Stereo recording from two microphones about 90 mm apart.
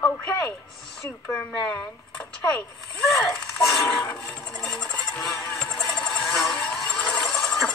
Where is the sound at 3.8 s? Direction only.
15° left (ahead or behind).